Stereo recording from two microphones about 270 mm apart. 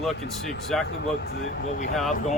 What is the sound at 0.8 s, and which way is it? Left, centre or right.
Speech, left.